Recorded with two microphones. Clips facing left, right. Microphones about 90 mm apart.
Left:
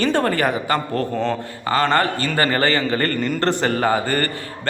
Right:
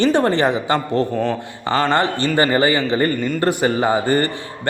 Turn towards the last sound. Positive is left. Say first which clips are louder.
# right 2 dB
turn(degrees=-20)  # may be behind; listen again after turning